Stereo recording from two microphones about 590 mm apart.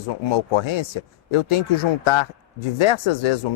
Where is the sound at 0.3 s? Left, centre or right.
Left.